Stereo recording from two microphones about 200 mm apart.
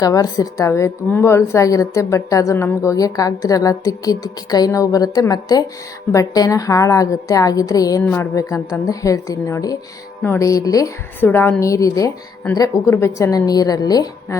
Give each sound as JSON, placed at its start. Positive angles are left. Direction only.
{"t": 0.0, "sound": "a woman's voice", "side_deg": 20}